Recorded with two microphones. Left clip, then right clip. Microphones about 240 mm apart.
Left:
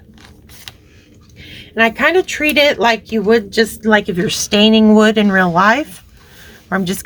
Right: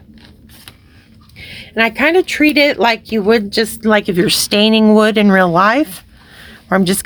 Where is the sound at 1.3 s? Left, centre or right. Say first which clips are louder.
Left 1 dB; right.